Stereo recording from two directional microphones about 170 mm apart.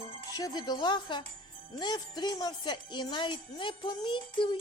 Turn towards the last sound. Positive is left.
turn(degrees=30)  # may be behind; listen again after turning